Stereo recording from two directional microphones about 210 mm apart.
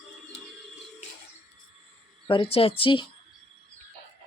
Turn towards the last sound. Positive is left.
turn(degrees=25)  # may be behind; listen again after turning